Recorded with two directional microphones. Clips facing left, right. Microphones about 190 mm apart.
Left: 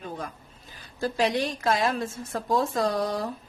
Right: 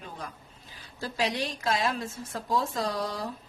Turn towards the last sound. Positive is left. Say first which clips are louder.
# left 5 dB
turn(degrees=50)  # may be behind; listen again after turning